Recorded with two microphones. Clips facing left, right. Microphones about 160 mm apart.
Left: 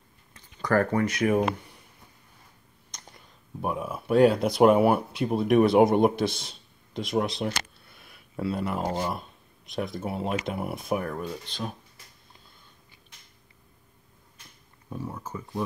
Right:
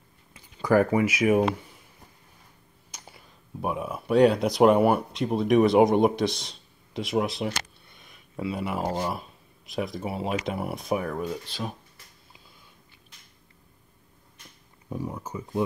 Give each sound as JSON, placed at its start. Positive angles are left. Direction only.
{"t": 0.3, "sound": "speech", "side_deg": -10}
{"t": 2.9, "sound": "a sound", "side_deg": -5}
{"t": 3.6, "sound": "speech", "side_deg": 0}
{"t": 14.9, "sound": "speech", "side_deg": -15}